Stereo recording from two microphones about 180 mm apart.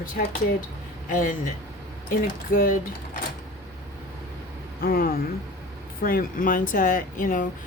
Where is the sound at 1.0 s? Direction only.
50° left (ahead or behind).